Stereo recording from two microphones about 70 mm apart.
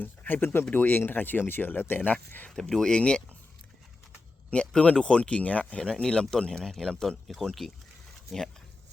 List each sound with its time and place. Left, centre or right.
0.0 s speech: left
2.5 s speech: centre
4.5 s speech: centre